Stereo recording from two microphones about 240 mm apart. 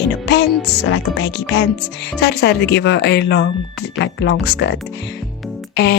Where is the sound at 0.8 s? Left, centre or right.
Left.